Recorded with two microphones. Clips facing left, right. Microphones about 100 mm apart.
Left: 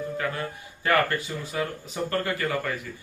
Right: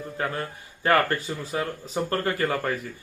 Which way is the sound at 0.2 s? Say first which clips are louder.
Even; 35° right (ahead or behind).